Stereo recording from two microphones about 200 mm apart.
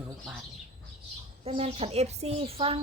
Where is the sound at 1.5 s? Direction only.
30° right (ahead or behind).